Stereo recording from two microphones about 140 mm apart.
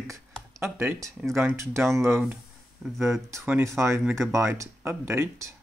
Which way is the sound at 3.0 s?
20° right (ahead or behind).